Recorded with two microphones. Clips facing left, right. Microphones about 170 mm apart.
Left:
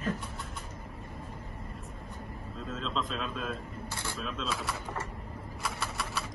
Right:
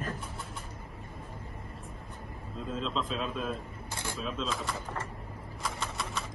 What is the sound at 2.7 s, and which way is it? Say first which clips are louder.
Speech: right 1 dB; 5° right (ahead or behind).